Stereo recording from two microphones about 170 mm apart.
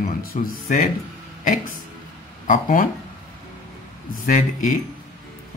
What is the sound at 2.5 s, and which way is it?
Speech, 55° left (ahead or behind).